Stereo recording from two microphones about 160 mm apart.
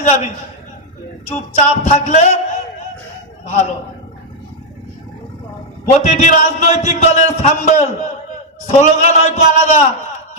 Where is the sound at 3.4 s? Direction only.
45° left (ahead or behind).